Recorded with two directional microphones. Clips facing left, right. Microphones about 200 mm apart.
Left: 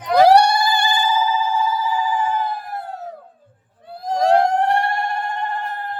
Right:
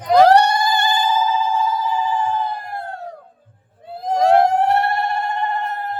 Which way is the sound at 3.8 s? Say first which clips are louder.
Right 2 dB; 20° right (ahead or behind).